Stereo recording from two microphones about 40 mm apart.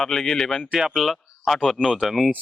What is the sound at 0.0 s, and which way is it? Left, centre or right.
Speech, centre.